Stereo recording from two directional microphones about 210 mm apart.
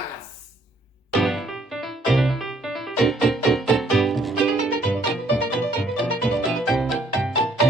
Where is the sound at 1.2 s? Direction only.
Centre (ahead or behind).